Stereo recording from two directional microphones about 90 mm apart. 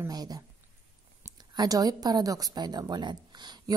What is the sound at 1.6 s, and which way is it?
A woman's voice, 45° right (ahead or behind).